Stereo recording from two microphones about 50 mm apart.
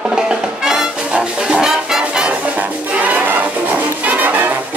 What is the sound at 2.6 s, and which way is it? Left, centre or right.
Music, right.